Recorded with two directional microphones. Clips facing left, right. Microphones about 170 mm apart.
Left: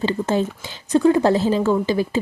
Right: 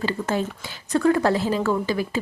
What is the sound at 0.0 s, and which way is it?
A woman's voice, 25° left (ahead or behind).